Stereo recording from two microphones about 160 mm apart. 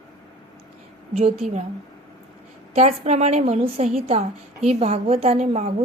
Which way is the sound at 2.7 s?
40° right (ahead or behind).